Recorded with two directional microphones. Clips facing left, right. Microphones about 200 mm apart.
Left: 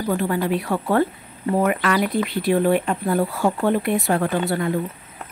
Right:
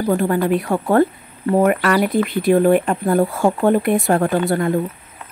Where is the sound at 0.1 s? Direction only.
50° right (ahead or behind).